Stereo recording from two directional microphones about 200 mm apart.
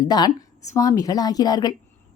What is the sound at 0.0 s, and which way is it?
A woman's voice, 20° left (ahead or behind).